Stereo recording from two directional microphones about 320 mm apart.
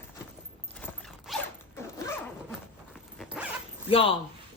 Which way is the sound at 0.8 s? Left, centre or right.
Centre.